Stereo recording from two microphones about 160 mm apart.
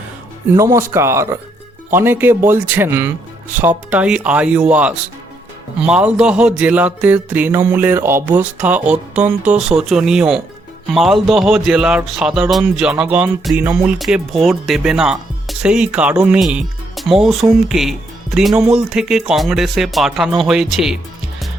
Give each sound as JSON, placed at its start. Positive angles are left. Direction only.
{"t": 0.5, "sound": "music", "side_deg": -20}
{"t": 10.9, "sound": "speech", "side_deg": 0}